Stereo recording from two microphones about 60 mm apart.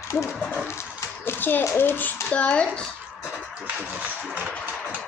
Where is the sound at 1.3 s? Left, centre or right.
Left.